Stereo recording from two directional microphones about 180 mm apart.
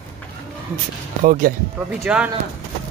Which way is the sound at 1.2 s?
50° right (ahead or behind).